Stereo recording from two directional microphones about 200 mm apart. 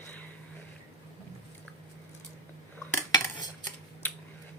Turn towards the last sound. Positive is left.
turn(degrees=20)  # may be behind; listen again after turning